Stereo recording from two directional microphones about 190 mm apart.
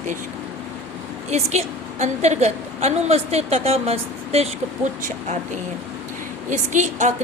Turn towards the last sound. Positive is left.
turn(degrees=-40)  # may be behind; listen again after turning